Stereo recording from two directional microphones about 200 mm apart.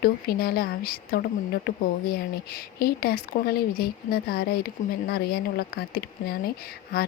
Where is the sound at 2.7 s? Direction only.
50° left (ahead or behind).